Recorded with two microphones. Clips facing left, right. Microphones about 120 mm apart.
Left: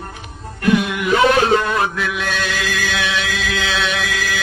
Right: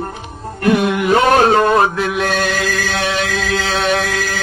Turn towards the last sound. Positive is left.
turn(degrees=-40)  # may be behind; listen again after turning